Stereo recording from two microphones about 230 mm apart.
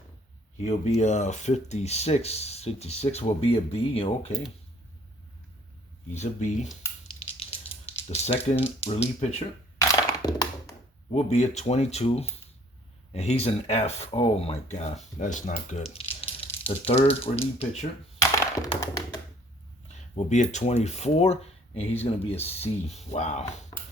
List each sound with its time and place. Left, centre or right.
0.6 s speech: left
6.1 s speech: left
7.2 s a sound: left
8.1 s speech: left
9.9 s thunk: centre
11.1 s speech: left
18.2 s tap: centre
20.1 s speech: left